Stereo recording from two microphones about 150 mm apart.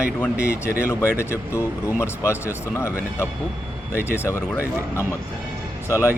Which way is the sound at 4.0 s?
10° right (ahead or behind).